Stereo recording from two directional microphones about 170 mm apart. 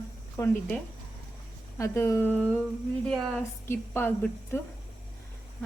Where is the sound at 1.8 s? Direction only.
15° left (ahead or behind).